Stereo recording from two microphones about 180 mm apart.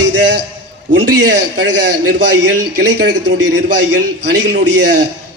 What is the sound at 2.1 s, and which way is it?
A man's voice, 70° right (ahead or behind).